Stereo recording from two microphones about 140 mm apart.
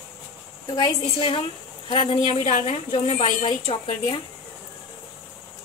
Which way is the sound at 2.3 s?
50° left (ahead or behind).